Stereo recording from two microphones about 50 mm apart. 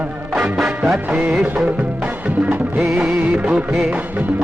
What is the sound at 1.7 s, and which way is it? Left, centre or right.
Music, right.